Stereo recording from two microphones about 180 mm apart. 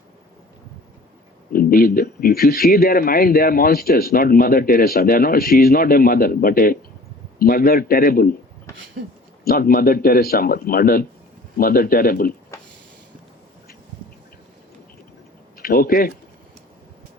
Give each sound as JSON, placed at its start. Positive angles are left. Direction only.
{"t": 1.5, "sound": "a man's voice", "side_deg": 55}
{"t": 9.4, "sound": "a man's voice", "side_deg": 55}
{"t": 15.5, "sound": "speech", "side_deg": 55}